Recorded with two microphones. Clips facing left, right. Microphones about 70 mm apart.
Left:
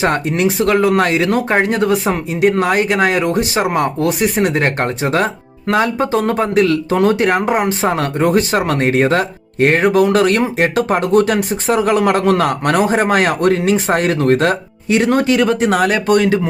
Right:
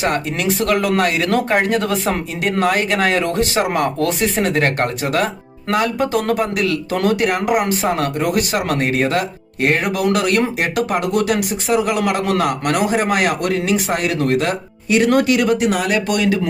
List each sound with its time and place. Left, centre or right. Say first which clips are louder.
0.0 s speech: left 4 dB; left
14.9 s speech: left 1 dB; left